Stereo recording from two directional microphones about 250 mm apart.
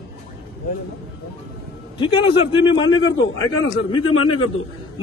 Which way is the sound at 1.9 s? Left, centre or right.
Centre.